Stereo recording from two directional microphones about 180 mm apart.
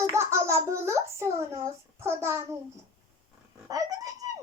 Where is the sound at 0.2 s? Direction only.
15° right (ahead or behind).